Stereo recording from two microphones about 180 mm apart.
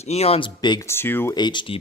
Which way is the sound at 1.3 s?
25° left (ahead or behind).